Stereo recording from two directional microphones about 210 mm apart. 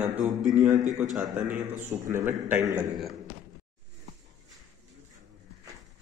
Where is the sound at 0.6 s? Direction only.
35° right (ahead or behind).